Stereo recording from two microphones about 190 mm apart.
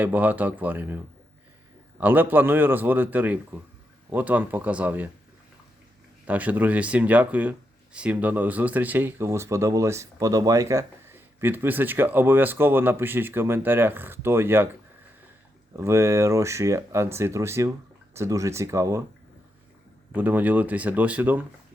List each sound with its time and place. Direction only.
0.0 s speech: 10° right (ahead or behind)
6.2 s speech: 10° right (ahead or behind)
15.7 s speech: 15° right (ahead or behind)
20.1 s speech: 10° right (ahead or behind)